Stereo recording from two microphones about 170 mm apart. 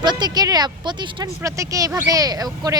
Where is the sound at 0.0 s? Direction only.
25° right (ahead or behind).